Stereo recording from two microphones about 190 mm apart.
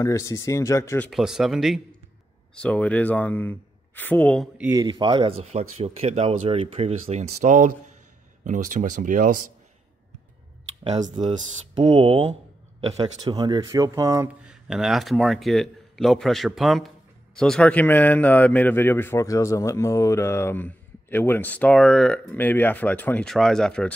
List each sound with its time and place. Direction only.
0.0 s a man's voice: 15° left (ahead or behind)
1.2 s a man's voice: centre (ahead or behind)
4.6 s speech: 10° right (ahead or behind)
4.8 s speech: 25° right (ahead or behind)
5.4 s speech: 35° right (ahead or behind)
10.8 s speech: 35° right (ahead or behind)
11.3 s speech: 25° right (ahead or behind)
14.4 s a man's voice: 5° right (ahead or behind)